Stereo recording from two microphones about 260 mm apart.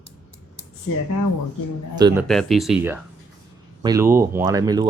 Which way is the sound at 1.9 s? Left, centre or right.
Centre.